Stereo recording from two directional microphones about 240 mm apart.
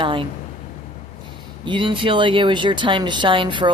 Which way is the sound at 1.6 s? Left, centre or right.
Centre.